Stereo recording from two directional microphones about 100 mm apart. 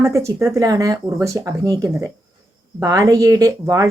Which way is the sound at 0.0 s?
30° right (ahead or behind).